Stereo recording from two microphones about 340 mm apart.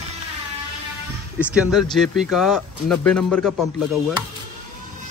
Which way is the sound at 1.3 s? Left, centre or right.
Centre.